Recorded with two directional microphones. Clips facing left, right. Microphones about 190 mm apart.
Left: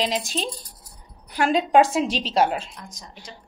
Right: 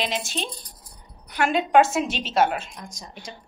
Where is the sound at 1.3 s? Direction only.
35° left (ahead or behind).